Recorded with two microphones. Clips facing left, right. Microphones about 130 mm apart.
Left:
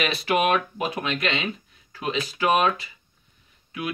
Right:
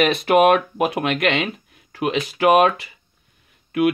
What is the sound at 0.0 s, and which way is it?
Speech, 55° right (ahead or behind).